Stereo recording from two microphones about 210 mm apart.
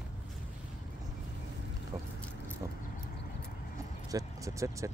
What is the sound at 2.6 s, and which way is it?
Vehicle, 15° right (ahead or behind).